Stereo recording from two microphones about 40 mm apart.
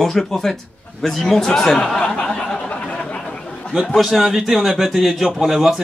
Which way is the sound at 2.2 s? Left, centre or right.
Centre.